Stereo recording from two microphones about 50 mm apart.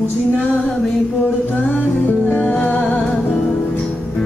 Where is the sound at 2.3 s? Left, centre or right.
Left.